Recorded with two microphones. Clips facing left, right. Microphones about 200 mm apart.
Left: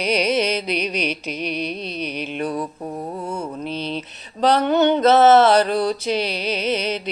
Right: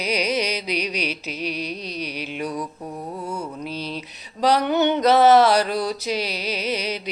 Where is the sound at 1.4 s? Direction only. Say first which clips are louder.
Left 2 dB; 60° left (ahead or behind).